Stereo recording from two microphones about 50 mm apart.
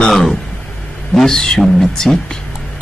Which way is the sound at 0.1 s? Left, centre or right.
Centre.